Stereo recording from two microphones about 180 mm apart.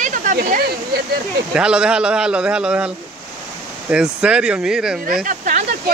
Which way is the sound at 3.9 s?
5° right (ahead or behind).